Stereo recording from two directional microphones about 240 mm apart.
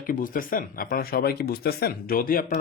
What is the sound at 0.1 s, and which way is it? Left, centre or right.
Speech, left.